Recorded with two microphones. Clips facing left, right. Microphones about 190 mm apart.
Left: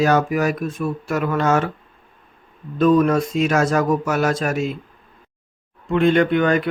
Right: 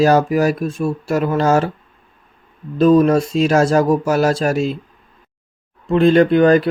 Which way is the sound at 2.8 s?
30° right (ahead or behind).